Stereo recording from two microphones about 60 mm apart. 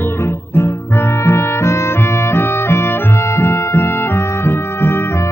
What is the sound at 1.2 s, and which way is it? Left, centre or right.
Music, left.